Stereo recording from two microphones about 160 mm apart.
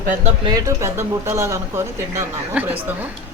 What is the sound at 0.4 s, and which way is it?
Speech, 20° right (ahead or behind).